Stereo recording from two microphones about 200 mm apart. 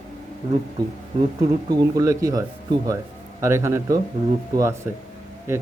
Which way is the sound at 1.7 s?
20° right (ahead or behind).